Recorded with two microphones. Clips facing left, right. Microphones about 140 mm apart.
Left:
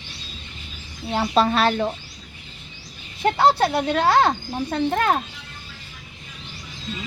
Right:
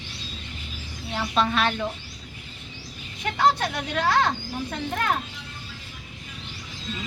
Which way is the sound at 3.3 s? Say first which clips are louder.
Left 3 dB; 30° left (ahead or behind).